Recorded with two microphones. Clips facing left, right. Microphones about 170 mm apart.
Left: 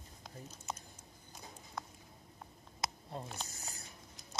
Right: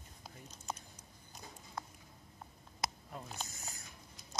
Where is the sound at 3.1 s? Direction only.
30° left (ahead or behind).